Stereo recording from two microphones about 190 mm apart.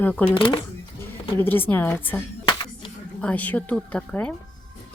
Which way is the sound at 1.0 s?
10° left (ahead or behind).